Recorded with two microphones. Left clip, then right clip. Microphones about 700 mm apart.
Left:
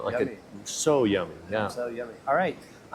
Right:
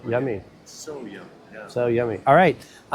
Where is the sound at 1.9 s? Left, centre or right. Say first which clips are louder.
Right 11 dB; right.